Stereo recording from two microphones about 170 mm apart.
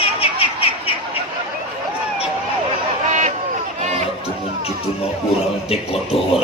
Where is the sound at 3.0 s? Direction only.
45° right (ahead or behind).